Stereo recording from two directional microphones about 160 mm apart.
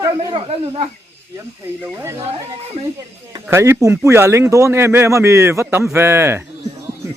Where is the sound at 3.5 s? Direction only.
15° right (ahead or behind).